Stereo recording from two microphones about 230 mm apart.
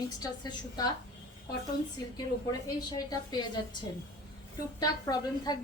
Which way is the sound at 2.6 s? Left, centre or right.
Centre.